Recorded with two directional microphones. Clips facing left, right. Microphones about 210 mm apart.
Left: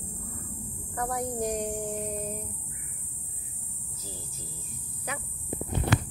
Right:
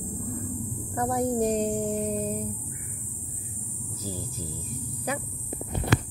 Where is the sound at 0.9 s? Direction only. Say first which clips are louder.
Right 6 dB; 30° right (ahead or behind).